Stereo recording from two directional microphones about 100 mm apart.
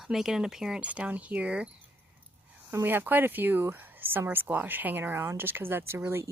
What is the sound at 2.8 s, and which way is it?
Speech, 20° right (ahead or behind).